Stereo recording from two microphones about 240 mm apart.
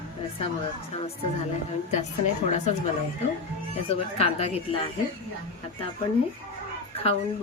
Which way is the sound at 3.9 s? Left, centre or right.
Left.